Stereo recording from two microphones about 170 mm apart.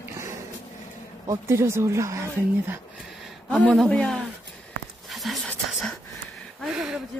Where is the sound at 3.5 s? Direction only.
5° left (ahead or behind).